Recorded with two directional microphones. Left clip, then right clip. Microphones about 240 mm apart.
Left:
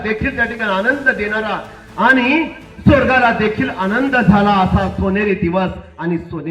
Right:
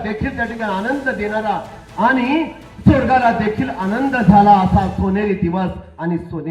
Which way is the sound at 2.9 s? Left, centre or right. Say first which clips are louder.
Left 2 dB; right.